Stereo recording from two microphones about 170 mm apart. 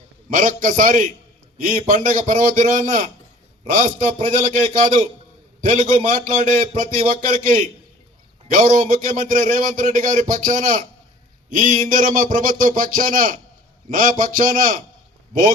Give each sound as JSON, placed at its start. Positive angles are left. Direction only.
{"t": 0.3, "sound": "a man's voice", "side_deg": -55}